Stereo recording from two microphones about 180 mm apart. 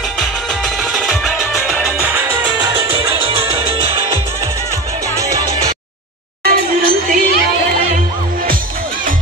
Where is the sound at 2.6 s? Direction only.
25° right (ahead or behind).